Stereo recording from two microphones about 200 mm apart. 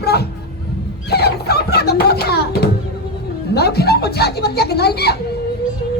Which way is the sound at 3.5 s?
55° left (ahead or behind).